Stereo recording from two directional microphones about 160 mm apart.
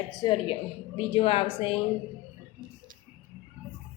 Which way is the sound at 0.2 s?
25° left (ahead or behind).